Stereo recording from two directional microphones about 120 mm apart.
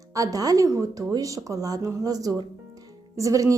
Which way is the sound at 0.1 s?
30° right (ahead or behind).